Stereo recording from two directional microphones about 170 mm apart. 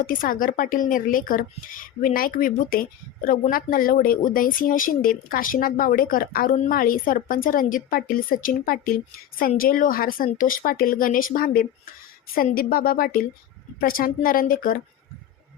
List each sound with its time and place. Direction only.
0.1 s speech: 55° left (ahead or behind)